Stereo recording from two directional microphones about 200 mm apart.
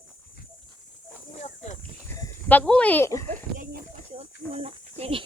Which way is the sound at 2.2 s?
10° left (ahead or behind).